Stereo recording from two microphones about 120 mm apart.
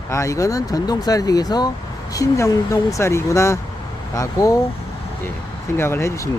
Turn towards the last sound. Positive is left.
turn(degrees=25)  # may be behind; listen again after turning